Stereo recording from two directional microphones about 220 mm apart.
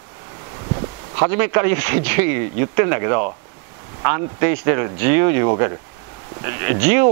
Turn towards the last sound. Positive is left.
turn(degrees=-15)  # may be behind; listen again after turning